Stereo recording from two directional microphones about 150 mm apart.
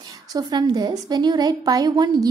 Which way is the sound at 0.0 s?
25° right (ahead or behind).